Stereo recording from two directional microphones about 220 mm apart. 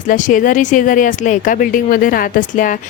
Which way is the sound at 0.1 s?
35° left (ahead or behind).